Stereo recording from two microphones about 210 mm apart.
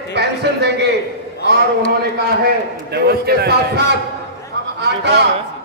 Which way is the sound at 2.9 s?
50° right (ahead or behind).